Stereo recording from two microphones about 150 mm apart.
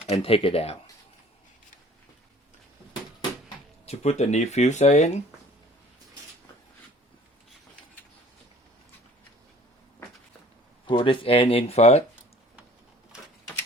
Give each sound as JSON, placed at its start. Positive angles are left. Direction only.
{"t": 0.0, "sound": "speech", "side_deg": 40}
{"t": 3.8, "sound": "speech", "side_deg": 45}
{"t": 10.8, "sound": "speech", "side_deg": 35}